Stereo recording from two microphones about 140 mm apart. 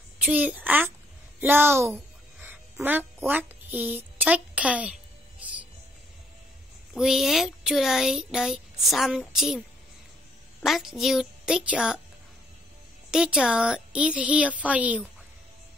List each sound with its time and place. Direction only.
0.2 s a woman's voice: 10° right (ahead or behind)
2.4 s quack: 15° right (ahead or behind)
6.9 s speech: 5° right (ahead or behind)
10.6 s speech: centre (ahead or behind)
13.1 s speech: 5° right (ahead or behind)